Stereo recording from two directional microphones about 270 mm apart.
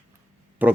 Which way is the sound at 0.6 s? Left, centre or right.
Centre.